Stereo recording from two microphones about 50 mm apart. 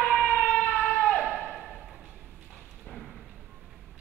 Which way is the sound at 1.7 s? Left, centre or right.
Centre.